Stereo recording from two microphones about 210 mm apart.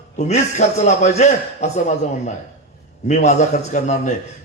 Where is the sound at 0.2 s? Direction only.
35° left (ahead or behind).